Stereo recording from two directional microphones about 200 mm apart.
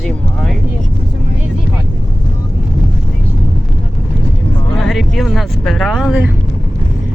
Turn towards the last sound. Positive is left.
turn(degrees=-5)  # may be behind; listen again after turning